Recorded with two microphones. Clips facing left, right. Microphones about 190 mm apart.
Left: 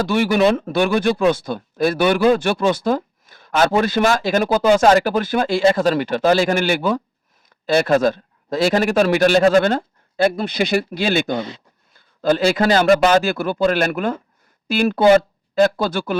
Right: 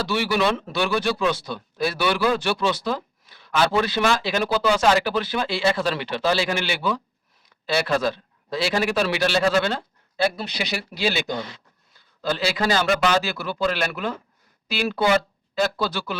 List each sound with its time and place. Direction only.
0.0 s speech: 50° left (ahead or behind)